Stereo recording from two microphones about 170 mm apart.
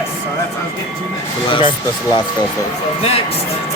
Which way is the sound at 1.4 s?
30° left (ahead or behind).